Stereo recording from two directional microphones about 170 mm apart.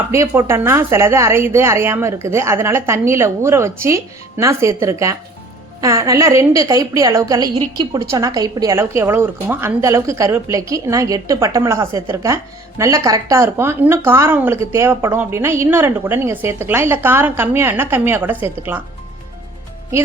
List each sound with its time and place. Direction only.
0.1 s a woman's voice: 15° right (ahead or behind)